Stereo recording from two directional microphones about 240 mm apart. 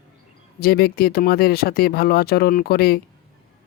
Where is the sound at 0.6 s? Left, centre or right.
Left.